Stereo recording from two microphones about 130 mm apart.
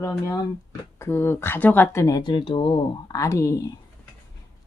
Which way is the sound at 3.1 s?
25° left (ahead or behind).